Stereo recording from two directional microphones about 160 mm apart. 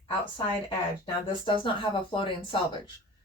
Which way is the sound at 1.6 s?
30° left (ahead or behind).